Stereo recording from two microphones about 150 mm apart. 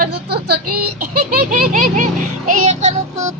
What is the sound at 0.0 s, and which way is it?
Speech, 90° right.